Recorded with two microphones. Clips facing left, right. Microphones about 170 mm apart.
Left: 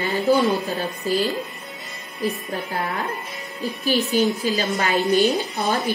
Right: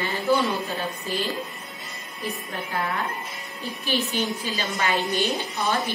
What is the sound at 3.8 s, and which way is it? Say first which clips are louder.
A woman's voice: left 7 dB; 40° left (ahead or behind).